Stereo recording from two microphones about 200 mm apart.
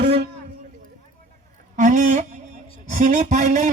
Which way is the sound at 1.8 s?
40° right (ahead or behind).